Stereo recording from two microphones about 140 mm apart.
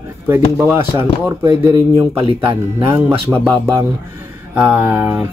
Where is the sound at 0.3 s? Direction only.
10° right (ahead or behind).